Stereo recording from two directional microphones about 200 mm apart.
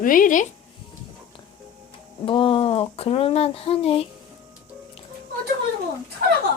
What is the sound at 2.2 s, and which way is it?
Speech, 25° left (ahead or behind).